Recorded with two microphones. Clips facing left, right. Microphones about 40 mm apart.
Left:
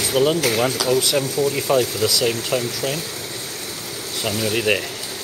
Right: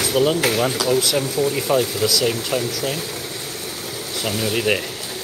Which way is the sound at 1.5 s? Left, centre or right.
Centre.